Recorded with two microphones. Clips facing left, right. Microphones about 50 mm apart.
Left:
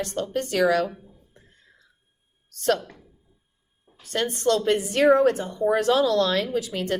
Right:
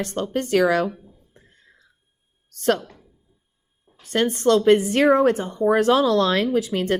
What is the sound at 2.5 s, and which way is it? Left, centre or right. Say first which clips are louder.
Speech: right 2 dB; right.